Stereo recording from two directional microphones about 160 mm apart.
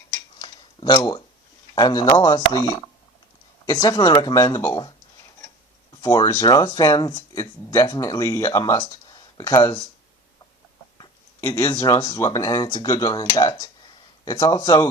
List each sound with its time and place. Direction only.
0.3 s a sound: 25° left (ahead or behind)
1.7 s speech: 25° left (ahead or behind)
6.0 s speech: 20° left (ahead or behind)
11.3 s speech: 15° left (ahead or behind)